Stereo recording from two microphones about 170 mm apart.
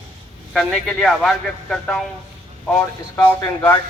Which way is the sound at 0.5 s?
Centre (ahead or behind).